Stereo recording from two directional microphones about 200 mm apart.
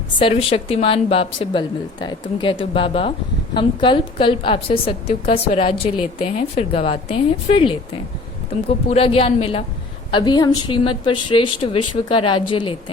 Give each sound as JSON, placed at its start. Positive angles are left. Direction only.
{"t": 0.2, "sound": "a woman's voice", "side_deg": 25}
{"t": 8.9, "sound": "a woman's voice", "side_deg": 30}